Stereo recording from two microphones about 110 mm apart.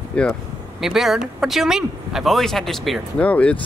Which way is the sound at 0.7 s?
5° right (ahead or behind).